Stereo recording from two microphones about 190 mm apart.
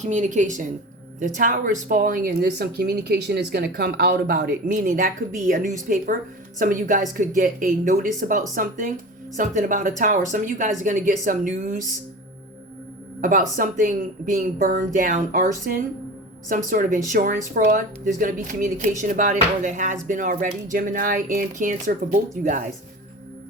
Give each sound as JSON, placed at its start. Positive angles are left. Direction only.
{"t": 0.0, "sound": "a woman's voice", "side_deg": -40}
{"t": 13.6, "sound": "speech", "side_deg": -45}